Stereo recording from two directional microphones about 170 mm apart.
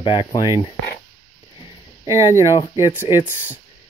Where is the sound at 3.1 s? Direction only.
30° left (ahead or behind).